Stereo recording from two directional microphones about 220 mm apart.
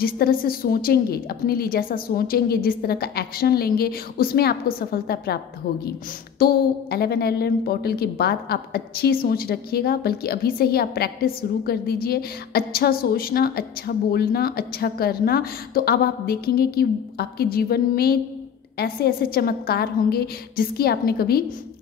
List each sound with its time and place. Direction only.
0.0 s a woman's voice: 40° left (ahead or behind)
6.4 s a woman's voice: 45° left (ahead or behind)